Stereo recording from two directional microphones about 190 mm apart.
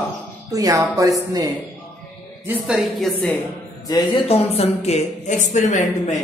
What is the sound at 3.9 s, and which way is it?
Speech, 30° left (ahead or behind).